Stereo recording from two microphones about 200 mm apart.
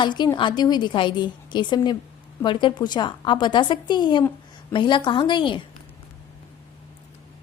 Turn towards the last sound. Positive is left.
turn(degrees=25)  # may be behind; listen again after turning